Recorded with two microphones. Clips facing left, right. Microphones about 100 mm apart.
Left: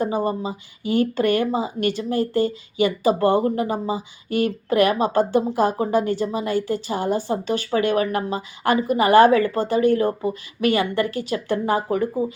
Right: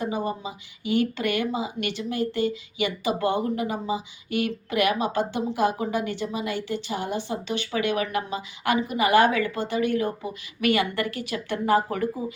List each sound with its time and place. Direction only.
0.0 s speech: 40° left (ahead or behind)